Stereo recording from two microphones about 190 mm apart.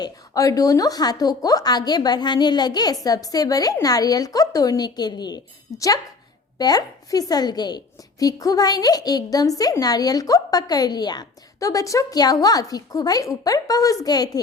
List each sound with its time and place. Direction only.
0.0 s a woman's voice: 20° left (ahead or behind)